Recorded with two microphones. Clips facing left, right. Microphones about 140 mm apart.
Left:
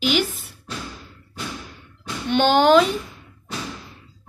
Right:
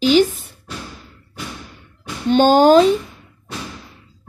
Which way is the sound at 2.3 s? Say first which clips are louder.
Right 4 dB; 40° right (ahead or behind).